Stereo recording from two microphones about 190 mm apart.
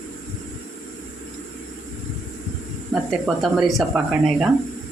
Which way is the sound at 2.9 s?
Centre (ahead or behind).